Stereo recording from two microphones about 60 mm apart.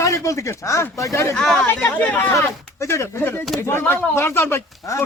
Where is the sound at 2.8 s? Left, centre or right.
Left.